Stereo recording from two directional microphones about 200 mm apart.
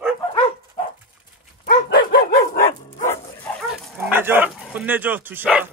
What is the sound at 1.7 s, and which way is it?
Dog, 40° left (ahead or behind).